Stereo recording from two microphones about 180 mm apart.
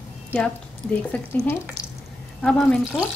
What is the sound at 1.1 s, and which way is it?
Speech, 10° left (ahead or behind).